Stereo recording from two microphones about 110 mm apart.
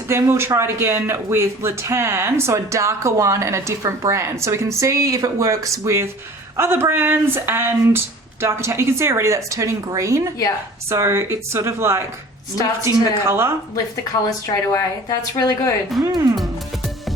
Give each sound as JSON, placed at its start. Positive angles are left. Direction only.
{"t": 0.1, "sound": "speech", "side_deg": -25}
{"t": 13.7, "sound": "a woman's voice", "side_deg": 30}
{"t": 16.0, "sound": "speech", "side_deg": -30}